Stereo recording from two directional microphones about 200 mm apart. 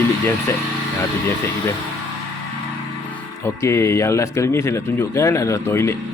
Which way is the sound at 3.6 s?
15° left (ahead or behind).